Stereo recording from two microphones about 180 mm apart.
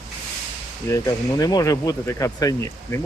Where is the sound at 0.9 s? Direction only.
20° left (ahead or behind).